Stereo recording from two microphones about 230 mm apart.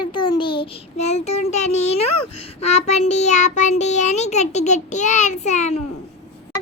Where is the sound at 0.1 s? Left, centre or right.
Left.